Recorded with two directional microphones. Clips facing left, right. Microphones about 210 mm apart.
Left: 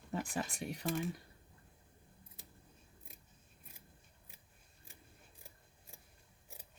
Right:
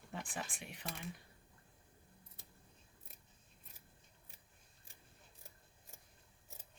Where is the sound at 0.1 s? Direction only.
40° left (ahead or behind).